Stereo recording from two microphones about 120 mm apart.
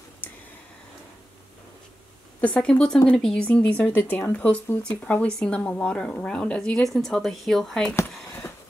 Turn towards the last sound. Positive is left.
turn(degrees=5)  # may be behind; listen again after turning